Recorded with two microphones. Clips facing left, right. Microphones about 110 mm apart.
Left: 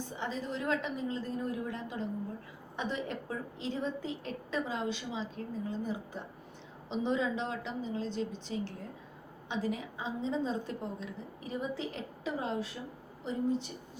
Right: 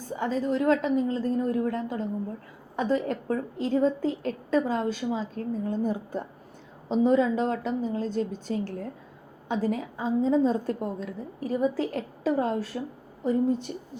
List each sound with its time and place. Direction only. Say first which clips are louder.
0.2 s a woman's voice: right 11 dB; 45° right (ahead or behind)